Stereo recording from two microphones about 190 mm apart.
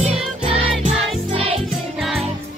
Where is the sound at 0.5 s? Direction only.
30° right (ahead or behind).